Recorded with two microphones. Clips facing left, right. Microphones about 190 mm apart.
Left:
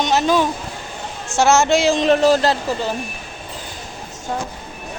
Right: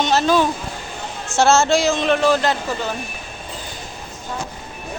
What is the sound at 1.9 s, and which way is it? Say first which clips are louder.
Speech: left 3 dB; 35° left (ahead or behind).